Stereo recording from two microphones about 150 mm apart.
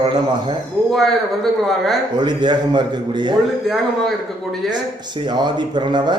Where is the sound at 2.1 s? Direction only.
30° right (ahead or behind).